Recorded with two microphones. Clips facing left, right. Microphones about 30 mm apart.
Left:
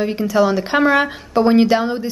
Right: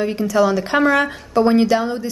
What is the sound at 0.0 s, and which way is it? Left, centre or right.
Speech, centre.